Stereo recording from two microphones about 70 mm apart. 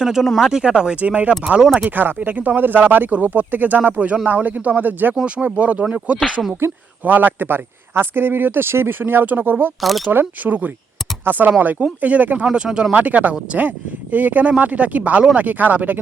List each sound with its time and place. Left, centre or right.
0.0 s speech: centre; by 5.1 s right
5.1 s a man's voice: centre; by 9.7 s right
9.8 s speech: centre
10.1 s speech: right